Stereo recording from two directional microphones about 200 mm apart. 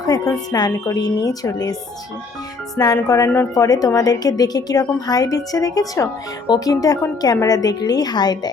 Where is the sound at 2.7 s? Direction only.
15° left (ahead or behind).